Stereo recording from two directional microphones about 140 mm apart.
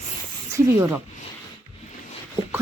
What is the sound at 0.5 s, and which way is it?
Speech, 15° right (ahead or behind).